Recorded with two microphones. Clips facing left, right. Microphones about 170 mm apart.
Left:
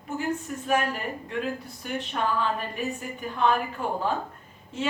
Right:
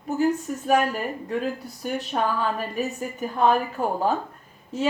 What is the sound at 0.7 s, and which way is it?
Speech, 40° right (ahead or behind).